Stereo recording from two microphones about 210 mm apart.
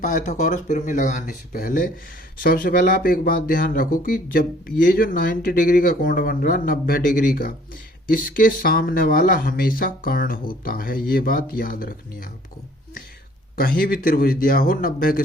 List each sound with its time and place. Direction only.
0.0 s speech: 40° left (ahead or behind)
13.6 s speech: 45° left (ahead or behind)